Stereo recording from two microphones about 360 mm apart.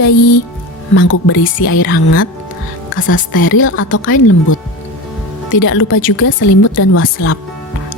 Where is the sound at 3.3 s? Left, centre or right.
Left.